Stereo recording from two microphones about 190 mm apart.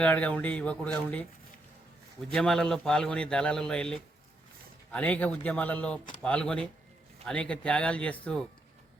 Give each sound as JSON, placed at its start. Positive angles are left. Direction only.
{"t": 0.0, "sound": "speech", "side_deg": 5}
{"t": 2.3, "sound": "speech", "side_deg": 5}